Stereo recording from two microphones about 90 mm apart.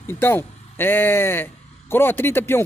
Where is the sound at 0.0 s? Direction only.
25° left (ahead or behind).